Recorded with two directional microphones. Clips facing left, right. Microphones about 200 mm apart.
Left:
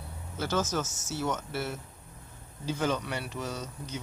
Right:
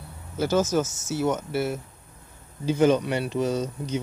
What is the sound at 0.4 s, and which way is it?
Speech, 10° right (ahead or behind).